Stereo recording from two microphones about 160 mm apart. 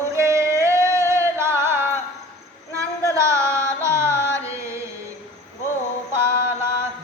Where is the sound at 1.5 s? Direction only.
15° right (ahead or behind).